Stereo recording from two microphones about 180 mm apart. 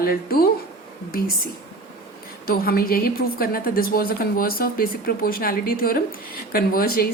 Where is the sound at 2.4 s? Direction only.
55° left (ahead or behind).